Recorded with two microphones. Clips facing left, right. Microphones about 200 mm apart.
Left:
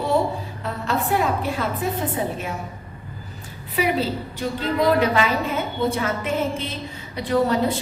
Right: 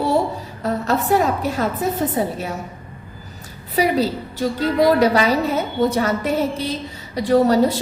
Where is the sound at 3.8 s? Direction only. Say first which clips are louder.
Right 4 dB; 40° right (ahead or behind).